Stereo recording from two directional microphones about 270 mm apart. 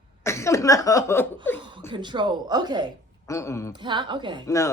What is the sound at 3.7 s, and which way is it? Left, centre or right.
Speech, centre.